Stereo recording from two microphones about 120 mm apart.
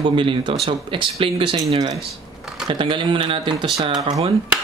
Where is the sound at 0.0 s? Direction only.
45° right (ahead or behind).